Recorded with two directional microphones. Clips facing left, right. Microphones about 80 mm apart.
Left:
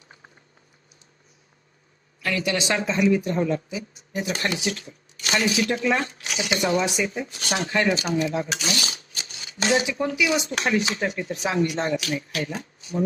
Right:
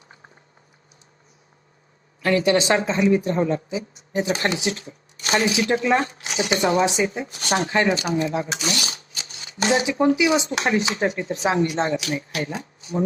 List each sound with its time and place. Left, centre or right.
2.2 s speech: right